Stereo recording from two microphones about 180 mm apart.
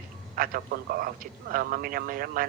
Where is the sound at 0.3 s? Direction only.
55° right (ahead or behind).